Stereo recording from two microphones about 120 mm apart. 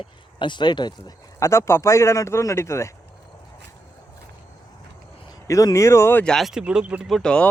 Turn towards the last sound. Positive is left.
turn(degrees=5)  # may be behind; listen again after turning